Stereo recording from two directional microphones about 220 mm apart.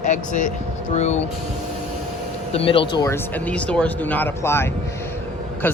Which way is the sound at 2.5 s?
25° left (ahead or behind).